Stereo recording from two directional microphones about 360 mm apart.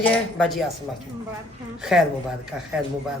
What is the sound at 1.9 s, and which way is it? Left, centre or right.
Speech, centre.